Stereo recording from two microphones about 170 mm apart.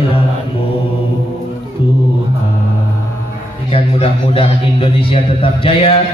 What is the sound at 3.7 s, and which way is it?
A man's voice, 35° left (ahead or behind).